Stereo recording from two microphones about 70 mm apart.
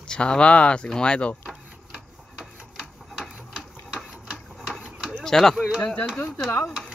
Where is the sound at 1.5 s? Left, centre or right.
Centre.